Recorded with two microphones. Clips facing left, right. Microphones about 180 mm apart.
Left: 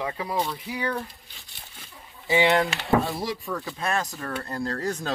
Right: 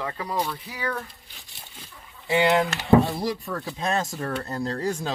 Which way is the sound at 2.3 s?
Centre (ahead or behind).